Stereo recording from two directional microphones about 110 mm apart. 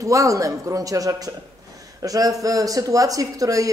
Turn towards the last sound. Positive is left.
turn(degrees=-30)  # may be behind; listen again after turning